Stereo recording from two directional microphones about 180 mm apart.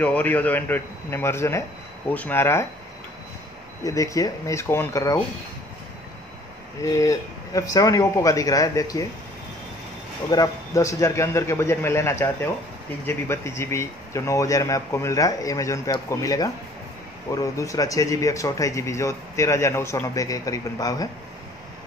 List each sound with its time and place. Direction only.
0.0 s speech: 10° left (ahead or behind)
3.8 s speech: 20° left (ahead or behind)
6.8 s a man's voice: 15° left (ahead or behind)
10.3 s speech: 20° left (ahead or behind)